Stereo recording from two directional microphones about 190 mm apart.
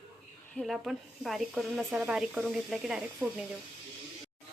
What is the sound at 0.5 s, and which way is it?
Speech, centre (ahead or behind).